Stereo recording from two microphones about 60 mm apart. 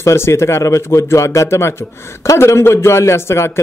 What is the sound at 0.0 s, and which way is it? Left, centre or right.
A man's voice, left.